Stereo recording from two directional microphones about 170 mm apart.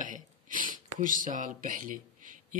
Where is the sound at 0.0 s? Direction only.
50° right (ahead or behind).